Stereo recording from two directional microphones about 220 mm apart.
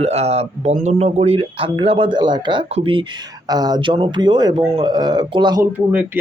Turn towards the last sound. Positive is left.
turn(degrees=-5)  # may be behind; listen again after turning